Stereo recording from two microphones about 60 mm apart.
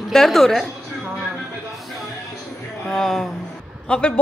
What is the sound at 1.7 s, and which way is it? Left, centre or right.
Music, centre.